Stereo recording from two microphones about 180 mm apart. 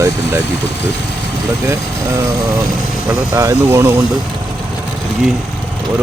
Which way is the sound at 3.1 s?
20° right (ahead or behind).